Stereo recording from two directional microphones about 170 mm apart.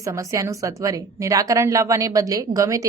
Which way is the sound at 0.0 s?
20° right (ahead or behind).